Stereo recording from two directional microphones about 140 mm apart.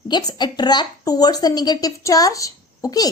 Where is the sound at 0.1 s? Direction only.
30° left (ahead or behind).